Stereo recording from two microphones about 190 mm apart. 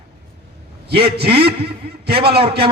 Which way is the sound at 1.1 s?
55° right (ahead or behind).